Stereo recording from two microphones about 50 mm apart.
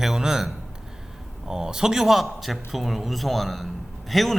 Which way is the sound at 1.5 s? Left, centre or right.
Centre.